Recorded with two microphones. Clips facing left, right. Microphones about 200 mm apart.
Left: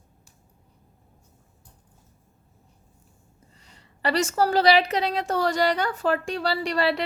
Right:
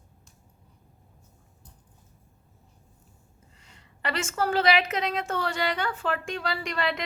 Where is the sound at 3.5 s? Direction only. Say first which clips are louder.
Left 1 dB; 35° left (ahead or behind).